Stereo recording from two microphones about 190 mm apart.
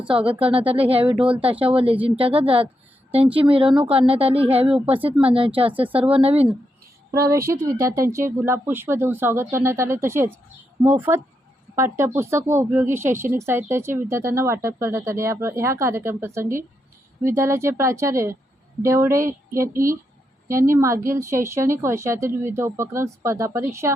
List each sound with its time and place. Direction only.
0.2 s a woman's voice: 30° right (ahead or behind)
7.1 s speech: 15° right (ahead or behind)